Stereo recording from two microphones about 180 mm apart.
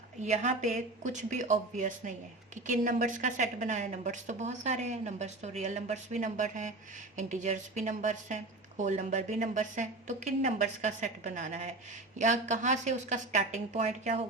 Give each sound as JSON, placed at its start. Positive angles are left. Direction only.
{"t": 0.2, "sound": "a woman's voice", "side_deg": -40}